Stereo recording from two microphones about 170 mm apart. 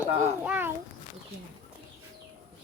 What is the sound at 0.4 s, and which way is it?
Speech, 10° right (ahead or behind).